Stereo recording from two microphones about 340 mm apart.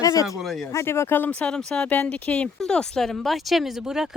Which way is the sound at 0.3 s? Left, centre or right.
Centre.